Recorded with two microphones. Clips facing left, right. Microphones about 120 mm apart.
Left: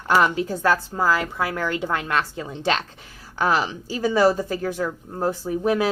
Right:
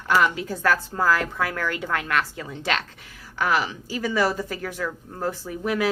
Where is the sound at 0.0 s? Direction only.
30° left (ahead or behind).